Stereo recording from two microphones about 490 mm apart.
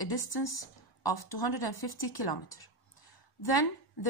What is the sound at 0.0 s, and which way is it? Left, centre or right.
A woman's voice, left.